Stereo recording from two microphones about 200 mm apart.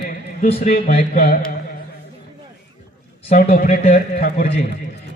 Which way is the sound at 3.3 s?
45° left (ahead or behind).